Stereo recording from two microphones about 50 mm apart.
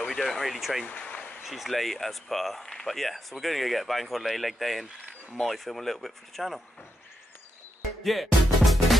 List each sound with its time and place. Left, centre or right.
0.1 s speech: centre
0.8 s a sound: left
1.4 s speech: centre
8.0 s music: centre